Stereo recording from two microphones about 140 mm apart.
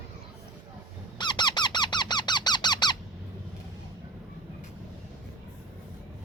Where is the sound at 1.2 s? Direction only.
35° left (ahead or behind).